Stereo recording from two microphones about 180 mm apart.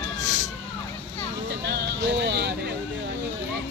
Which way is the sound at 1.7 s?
70° right (ahead or behind).